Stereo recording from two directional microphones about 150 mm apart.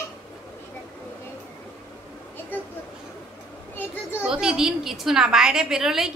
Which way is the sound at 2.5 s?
10° left (ahead or behind).